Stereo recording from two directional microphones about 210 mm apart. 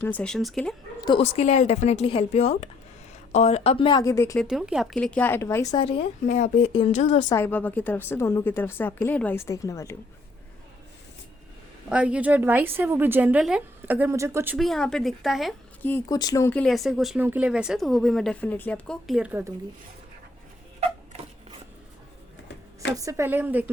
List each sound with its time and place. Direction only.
0.0 s speech: 5° left (ahead or behind)
1.0 s a woman's voice: 25° left (ahead or behind)
4.4 s a woman's voice: centre (ahead or behind); by 7.3 s 35° left (ahead or behind)
7.3 s a woman's voice: 10° left (ahead or behind)
11.9 s a woman's voice: 5° right (ahead or behind)
14.6 s speech: centre (ahead or behind)
22.4 s a sound: 55° left (ahead or behind)
23.0 s a woman's voice: 15° right (ahead or behind)